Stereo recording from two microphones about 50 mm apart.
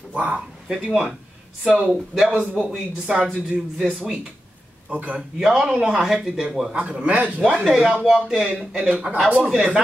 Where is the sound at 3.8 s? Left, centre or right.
Centre.